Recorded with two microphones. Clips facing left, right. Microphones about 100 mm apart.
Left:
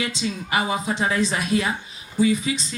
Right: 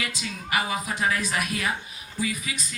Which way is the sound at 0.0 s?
25° left (ahead or behind).